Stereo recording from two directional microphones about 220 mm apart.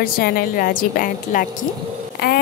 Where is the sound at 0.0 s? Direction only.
40° left (ahead or behind).